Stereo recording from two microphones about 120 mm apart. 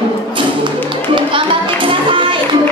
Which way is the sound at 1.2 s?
45° right (ahead or behind).